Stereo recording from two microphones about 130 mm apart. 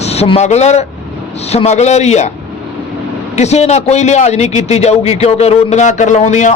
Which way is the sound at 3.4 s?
60° left (ahead or behind).